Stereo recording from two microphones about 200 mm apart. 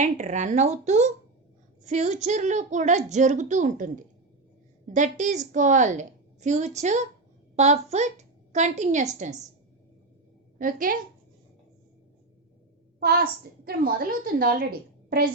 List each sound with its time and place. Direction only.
0.0 s a woman's voice: 35° right (ahead or behind)
10.6 s a woman's voice: 45° right (ahead or behind)
13.7 s a woman's voice: 45° right (ahead or behind)